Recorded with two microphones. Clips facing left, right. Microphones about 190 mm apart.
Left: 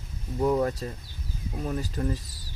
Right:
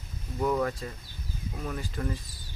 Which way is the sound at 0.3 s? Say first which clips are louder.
Left 3 dB; 25° left (ahead or behind).